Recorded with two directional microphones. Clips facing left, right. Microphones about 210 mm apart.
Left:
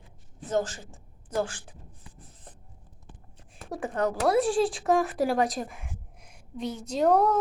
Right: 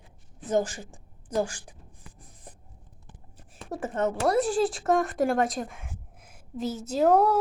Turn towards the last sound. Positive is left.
turn(degrees=-5)  # may be behind; listen again after turning